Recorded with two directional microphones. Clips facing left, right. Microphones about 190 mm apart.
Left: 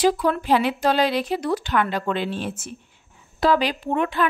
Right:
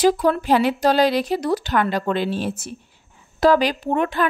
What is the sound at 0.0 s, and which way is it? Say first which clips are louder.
A woman's voice: right 3 dB; 45° right (ahead or behind).